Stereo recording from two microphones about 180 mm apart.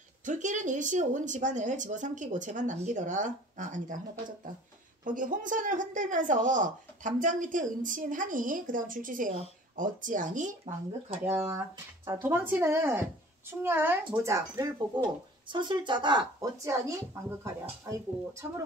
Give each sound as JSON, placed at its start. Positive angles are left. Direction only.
{"t": 0.2, "sound": "speech", "side_deg": -45}
{"t": 5.0, "sound": "speech", "side_deg": -45}
{"t": 12.1, "sound": "a woman's voice", "side_deg": -15}